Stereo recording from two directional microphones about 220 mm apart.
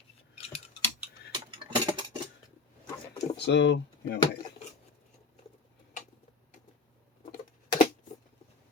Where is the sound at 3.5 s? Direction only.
55° left (ahead or behind).